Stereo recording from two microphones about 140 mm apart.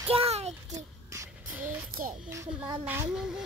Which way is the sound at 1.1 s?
10° right (ahead or behind).